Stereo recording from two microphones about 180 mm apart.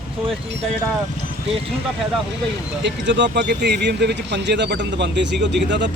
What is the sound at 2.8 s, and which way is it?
Speech, 75° right (ahead or behind).